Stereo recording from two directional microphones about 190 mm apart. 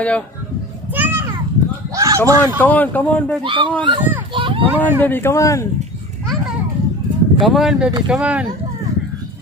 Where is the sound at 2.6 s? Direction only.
10° left (ahead or behind).